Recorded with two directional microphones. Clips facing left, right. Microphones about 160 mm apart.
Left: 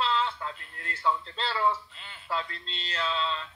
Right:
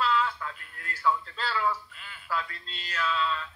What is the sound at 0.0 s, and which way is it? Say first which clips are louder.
A man's voice: right 1 dB; 25° left (ahead or behind).